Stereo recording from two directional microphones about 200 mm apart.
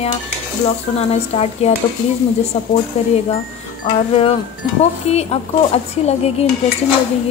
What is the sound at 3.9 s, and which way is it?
Speech, 35° left (ahead or behind).